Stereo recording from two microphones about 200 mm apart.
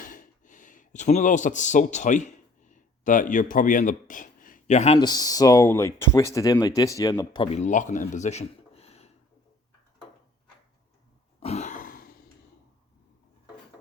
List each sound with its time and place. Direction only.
0.0 s a sound: 40° left (ahead or behind)
4.9 s speech: 20° left (ahead or behind)
11.3 s throat clearing: 30° left (ahead or behind)